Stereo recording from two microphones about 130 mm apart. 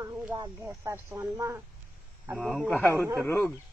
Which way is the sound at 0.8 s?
15° right (ahead or behind).